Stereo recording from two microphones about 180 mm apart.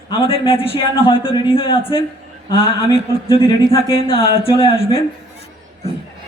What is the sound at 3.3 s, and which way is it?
Speech, 30° left (ahead or behind).